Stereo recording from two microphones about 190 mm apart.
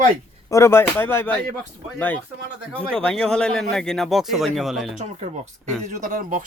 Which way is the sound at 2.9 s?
5° left (ahead or behind).